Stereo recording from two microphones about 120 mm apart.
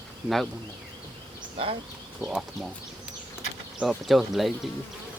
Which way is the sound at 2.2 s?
5° right (ahead or behind).